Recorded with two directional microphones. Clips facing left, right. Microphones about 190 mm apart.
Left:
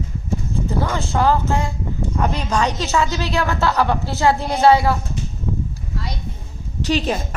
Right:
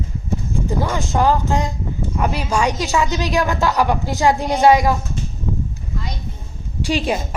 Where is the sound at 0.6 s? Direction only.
15° right (ahead or behind).